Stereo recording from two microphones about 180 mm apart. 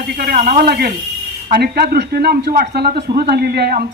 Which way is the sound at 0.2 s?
55° right (ahead or behind).